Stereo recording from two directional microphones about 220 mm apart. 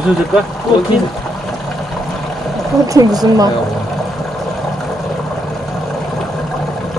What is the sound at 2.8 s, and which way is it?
Speech, 15° right (ahead or behind).